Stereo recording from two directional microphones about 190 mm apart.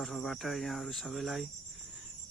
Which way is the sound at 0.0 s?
Centre (ahead or behind).